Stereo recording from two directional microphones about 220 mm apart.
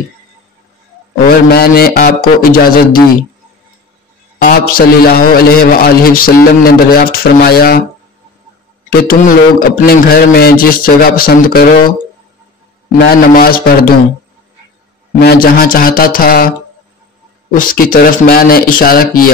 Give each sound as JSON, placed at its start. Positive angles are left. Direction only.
{"t": 1.2, "sound": "a man's voice", "side_deg": 45}
{"t": 4.4, "sound": "a man's voice", "side_deg": 40}
{"t": 9.0, "sound": "a man's voice", "side_deg": 40}
{"t": 12.9, "sound": "a man's voice", "side_deg": 45}
{"t": 15.1, "sound": "a man's voice", "side_deg": 45}
{"t": 17.6, "sound": "a man's voice", "side_deg": 40}